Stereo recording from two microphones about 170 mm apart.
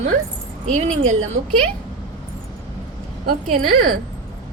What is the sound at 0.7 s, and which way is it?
Speech, 45° right (ahead or behind).